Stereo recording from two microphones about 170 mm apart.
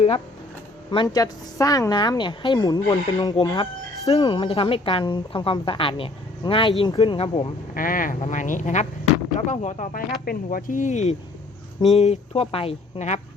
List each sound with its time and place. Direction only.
0.9 s a woman's voice: 25° left (ahead or behind)
7.7 s speech: 55° left (ahead or behind); by 13.1 s 40° left (ahead or behind)